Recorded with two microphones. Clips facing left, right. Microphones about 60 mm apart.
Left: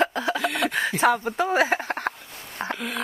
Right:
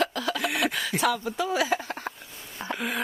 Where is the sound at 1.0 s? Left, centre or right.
Left.